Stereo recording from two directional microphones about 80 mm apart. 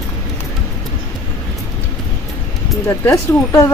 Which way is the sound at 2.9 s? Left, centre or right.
Left.